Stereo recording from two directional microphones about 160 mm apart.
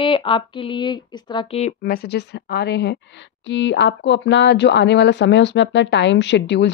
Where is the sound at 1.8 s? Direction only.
75° left (ahead or behind).